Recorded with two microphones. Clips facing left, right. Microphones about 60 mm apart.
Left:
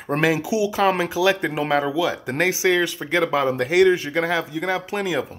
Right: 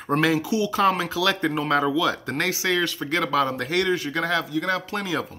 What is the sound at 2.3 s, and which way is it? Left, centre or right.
Speech, left.